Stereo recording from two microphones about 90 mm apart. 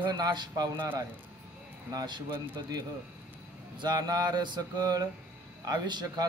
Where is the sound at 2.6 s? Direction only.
45° right (ahead or behind).